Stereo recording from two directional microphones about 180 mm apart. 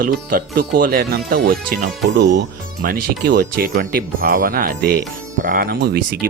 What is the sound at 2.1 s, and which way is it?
Speech, 75° right (ahead or behind).